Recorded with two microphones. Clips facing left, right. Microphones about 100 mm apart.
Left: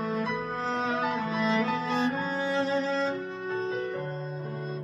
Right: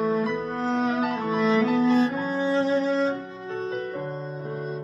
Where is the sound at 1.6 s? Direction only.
5° right (ahead or behind).